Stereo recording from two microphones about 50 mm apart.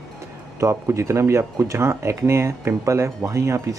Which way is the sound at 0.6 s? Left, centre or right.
Right.